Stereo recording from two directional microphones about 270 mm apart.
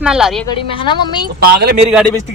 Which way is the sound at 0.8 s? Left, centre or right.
Centre.